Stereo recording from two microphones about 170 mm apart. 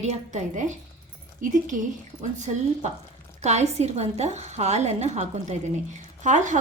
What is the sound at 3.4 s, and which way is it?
A woman's voice, 40° right (ahead or behind).